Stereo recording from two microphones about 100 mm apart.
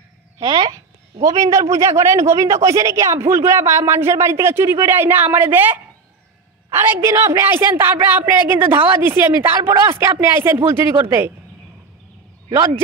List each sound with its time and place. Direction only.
0.4 s speech: 45° right (ahead or behind)
1.2 s speech: 35° right (ahead or behind)
12.4 s speech: 30° right (ahead or behind)